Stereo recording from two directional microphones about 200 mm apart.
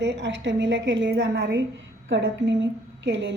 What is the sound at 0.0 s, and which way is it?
A woman's voice, 60° right (ahead or behind).